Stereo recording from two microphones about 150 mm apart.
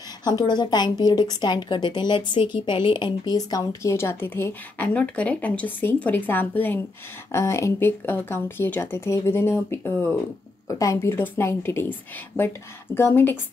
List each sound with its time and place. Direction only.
0.2 s a woman's voice: 25° left (ahead or behind)